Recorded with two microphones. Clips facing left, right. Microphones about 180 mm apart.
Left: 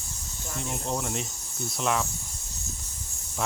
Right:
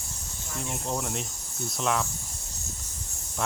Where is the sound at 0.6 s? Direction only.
Centre (ahead or behind).